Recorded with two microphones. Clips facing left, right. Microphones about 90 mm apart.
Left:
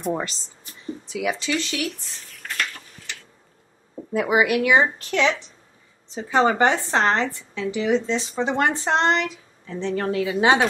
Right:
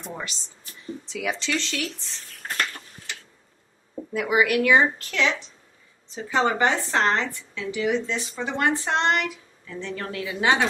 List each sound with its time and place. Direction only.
0.1 s speech: 35° left (ahead or behind)
1.0 s speech: 15° left (ahead or behind)
4.1 s a woman's voice: 25° left (ahead or behind)